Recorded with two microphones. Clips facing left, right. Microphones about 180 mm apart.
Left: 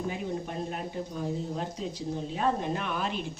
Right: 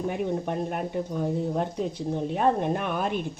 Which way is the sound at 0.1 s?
60° right (ahead or behind).